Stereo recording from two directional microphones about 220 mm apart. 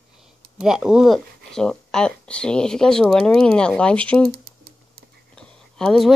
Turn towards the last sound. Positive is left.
turn(degrees=5)  # may be behind; listen again after turning